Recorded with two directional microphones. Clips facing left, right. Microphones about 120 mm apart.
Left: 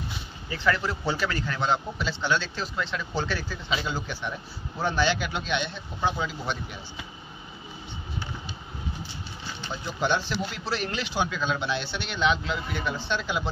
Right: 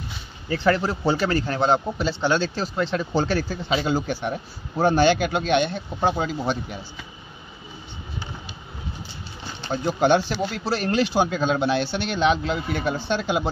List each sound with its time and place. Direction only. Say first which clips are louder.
0.5 s a man's voice: right 6 dB; 40° right (ahead or behind)
9.7 s speech: right 8 dB; 50° right (ahead or behind)